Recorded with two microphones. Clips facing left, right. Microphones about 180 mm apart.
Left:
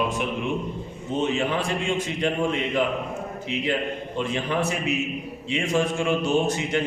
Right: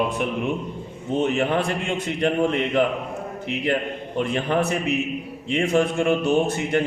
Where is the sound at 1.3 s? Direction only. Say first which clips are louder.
Right 3 dB; 60° right (ahead or behind).